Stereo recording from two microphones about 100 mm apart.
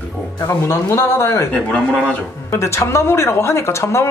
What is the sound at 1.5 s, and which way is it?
Speech, 15° left (ahead or behind).